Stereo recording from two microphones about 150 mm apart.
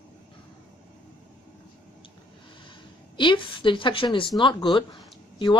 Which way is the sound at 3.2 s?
35° left (ahead or behind).